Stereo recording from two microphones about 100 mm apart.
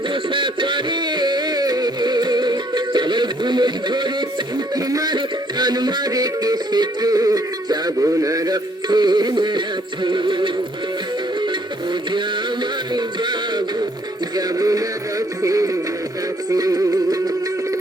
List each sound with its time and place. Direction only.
0.1 s a sound: 55° right (ahead or behind)
4.7 s music: 40° right (ahead or behind)
12.9 s music: 45° right (ahead or behind)